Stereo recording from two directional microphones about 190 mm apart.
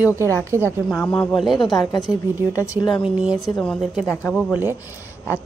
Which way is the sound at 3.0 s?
5° right (ahead or behind).